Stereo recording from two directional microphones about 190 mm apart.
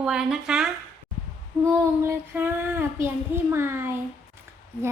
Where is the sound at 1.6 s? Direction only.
15° right (ahead or behind).